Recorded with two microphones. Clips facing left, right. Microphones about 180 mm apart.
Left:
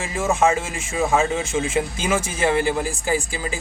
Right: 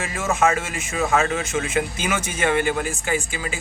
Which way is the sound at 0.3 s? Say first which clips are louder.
Right 1 dB; 30° left (ahead or behind).